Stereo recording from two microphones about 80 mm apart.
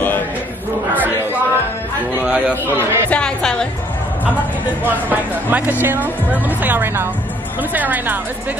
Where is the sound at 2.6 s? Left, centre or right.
Right.